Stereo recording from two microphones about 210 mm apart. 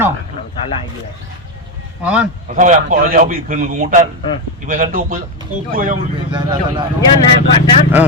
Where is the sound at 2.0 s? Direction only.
5° right (ahead or behind).